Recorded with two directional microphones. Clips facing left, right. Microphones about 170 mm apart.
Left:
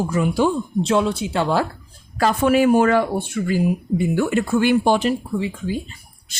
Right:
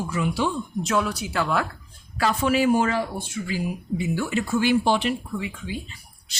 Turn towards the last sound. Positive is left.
turn(degrees=45)  # may be behind; listen again after turning